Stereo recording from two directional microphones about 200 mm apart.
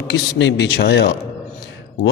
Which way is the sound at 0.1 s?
60° left (ahead or behind).